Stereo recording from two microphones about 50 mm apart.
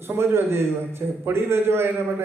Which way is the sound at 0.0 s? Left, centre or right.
Right.